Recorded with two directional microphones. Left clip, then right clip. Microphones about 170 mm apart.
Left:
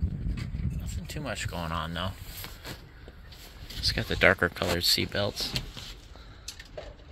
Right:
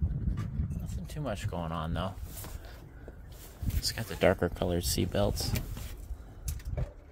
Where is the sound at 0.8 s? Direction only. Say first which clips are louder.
Left 1 dB; 10° right (ahead or behind); by 2.1 s 30° right (ahead or behind).